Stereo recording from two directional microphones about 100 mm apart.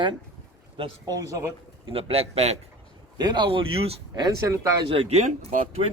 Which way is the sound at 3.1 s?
45° right (ahead or behind).